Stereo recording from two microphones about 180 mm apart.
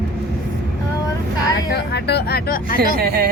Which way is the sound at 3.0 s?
60° right (ahead or behind).